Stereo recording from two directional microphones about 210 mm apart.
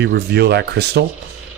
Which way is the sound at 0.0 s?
50° right (ahead or behind).